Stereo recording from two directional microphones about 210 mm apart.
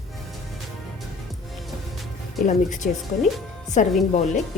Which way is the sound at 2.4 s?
35° left (ahead or behind).